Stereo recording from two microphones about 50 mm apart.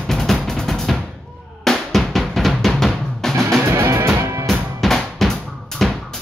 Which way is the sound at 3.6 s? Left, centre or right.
Right.